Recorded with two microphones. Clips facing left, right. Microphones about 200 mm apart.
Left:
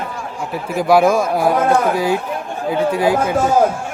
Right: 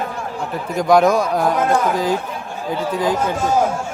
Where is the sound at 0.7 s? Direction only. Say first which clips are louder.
Left 1 dB; 5° left (ahead or behind).